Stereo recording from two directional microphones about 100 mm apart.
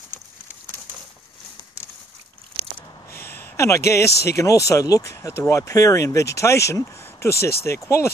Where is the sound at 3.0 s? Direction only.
20° left (ahead or behind).